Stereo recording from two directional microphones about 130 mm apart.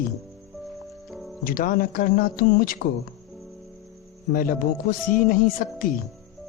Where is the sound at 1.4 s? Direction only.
90° left.